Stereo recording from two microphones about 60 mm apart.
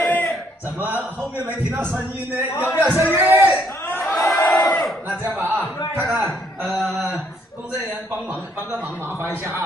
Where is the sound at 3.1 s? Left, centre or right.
Right.